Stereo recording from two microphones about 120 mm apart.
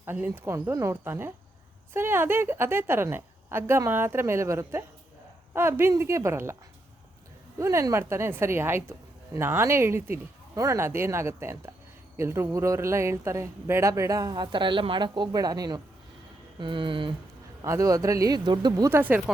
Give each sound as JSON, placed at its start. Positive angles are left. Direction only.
{"t": 0.0, "sound": "a woman's voice", "side_deg": -20}
{"t": 7.6, "sound": "a woman's voice", "side_deg": -25}
{"t": 16.6, "sound": "speech", "side_deg": -45}
{"t": 17.6, "sound": "a woman's voice", "side_deg": -30}
{"t": 18.9, "sound": "speech", "side_deg": -15}